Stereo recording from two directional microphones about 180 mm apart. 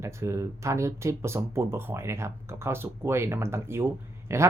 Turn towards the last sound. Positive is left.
turn(degrees=-15)  # may be behind; listen again after turning